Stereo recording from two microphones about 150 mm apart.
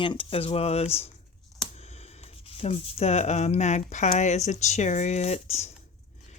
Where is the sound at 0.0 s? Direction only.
35° left (ahead or behind).